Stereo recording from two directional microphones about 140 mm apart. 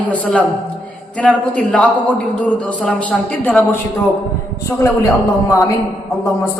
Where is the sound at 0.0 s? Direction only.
10° left (ahead or behind).